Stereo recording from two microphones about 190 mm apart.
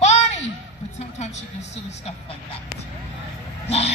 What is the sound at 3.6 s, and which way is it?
Speech, 35° left (ahead or behind).